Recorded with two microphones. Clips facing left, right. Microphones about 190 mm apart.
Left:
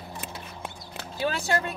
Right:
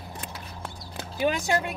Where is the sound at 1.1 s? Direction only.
15° right (ahead or behind).